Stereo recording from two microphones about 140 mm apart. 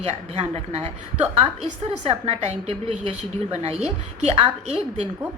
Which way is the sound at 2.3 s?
50° right (ahead or behind).